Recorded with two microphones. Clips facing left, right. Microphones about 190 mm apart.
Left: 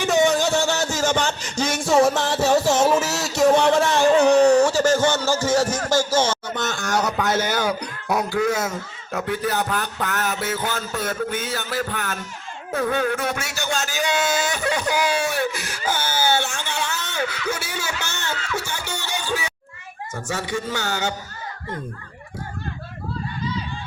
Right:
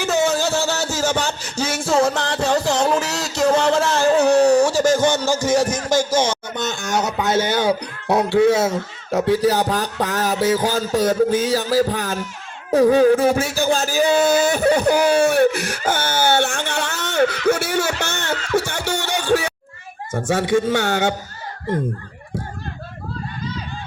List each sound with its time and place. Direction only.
0.0 s music: 5° right (ahead or behind); by 12.2 s 35° right (ahead or behind)
12.7 s speech: 35° right (ahead or behind)
14.3 s a sound: 60° right (ahead or behind)
20.1 s speech: 55° right (ahead or behind)